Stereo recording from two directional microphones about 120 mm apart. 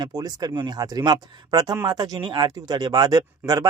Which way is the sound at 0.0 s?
30° right (ahead or behind).